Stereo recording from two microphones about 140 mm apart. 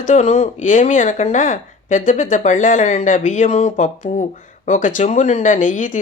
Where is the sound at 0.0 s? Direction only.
55° left (ahead or behind).